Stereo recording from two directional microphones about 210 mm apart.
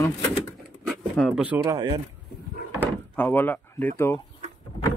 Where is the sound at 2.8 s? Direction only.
10° left (ahead or behind).